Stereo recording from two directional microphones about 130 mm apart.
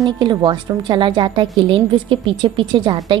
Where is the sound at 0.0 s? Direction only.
35° right (ahead or behind).